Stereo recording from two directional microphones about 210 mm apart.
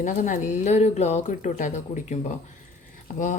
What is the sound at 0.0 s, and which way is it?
A woman's voice, 35° left (ahead or behind).